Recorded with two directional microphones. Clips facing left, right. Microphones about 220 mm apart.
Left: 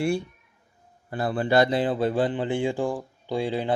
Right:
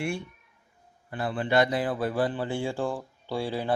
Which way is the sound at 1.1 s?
40° left (ahead or behind).